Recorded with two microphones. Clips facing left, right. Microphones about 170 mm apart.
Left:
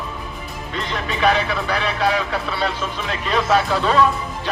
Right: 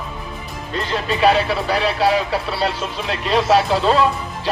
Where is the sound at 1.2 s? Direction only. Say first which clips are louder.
Right 3 dB; 30° right (ahead or behind).